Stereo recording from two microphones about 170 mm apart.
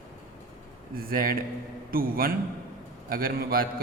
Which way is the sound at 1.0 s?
60° right (ahead or behind).